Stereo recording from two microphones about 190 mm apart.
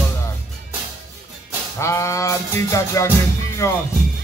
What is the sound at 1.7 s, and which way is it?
Music, 15° left (ahead or behind).